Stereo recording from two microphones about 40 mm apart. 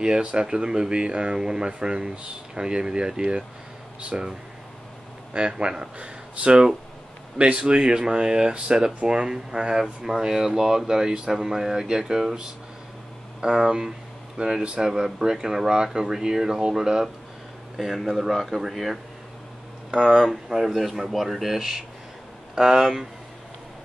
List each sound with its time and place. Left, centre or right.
0.0 s speech: right
14.6 s speech: right
14.9 s speech: centre
17.7 s speech: centre
19.9 s speech: right
20.2 s speech: centre